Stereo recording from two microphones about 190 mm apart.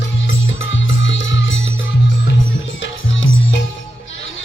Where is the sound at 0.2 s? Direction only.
85° left.